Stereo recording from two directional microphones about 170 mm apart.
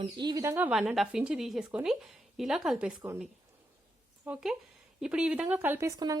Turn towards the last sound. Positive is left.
turn(degrees=-20)  # may be behind; listen again after turning